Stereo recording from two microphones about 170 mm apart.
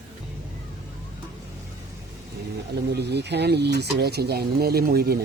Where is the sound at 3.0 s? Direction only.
80° right.